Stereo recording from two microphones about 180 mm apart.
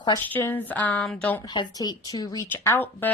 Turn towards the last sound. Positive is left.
turn(degrees=10)  # may be behind; listen again after turning